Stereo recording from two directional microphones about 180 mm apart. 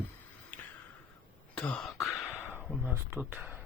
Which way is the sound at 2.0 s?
15° left (ahead or behind).